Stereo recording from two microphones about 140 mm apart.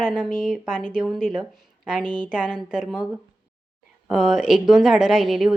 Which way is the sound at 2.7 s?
5° right (ahead or behind).